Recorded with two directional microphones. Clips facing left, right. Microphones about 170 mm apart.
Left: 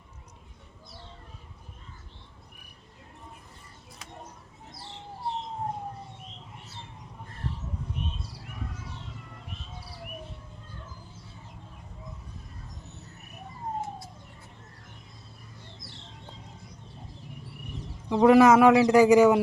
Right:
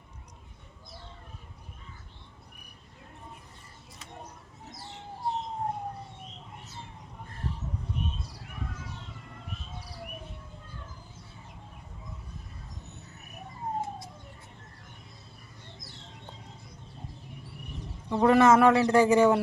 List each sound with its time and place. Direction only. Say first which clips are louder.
18.1 s speech: left 3 dB; 10° left (ahead or behind)